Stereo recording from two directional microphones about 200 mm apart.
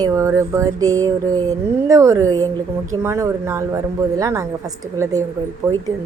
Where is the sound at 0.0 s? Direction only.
15° right (ahead or behind).